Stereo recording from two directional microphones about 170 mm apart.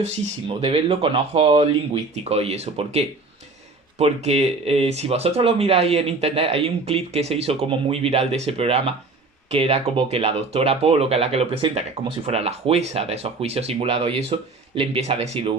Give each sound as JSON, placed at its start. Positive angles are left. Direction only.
{"t": 0.0, "sound": "speech", "side_deg": -35}